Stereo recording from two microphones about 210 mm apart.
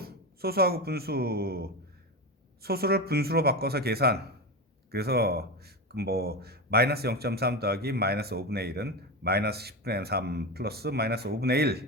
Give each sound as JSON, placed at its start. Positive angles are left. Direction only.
{"t": 0.0, "sound": "speech", "side_deg": -45}